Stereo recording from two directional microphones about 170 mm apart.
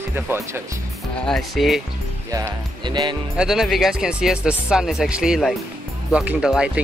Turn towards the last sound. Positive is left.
turn(degrees=-5)  # may be behind; listen again after turning